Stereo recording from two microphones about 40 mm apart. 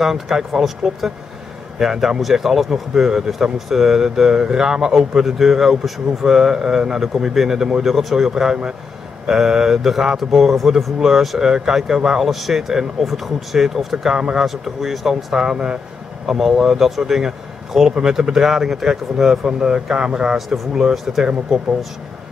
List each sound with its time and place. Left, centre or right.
0.0 s speech: centre
4.9 s speech: centre
15.4 s speech: right
16.3 s speech: centre
20.3 s speech: centre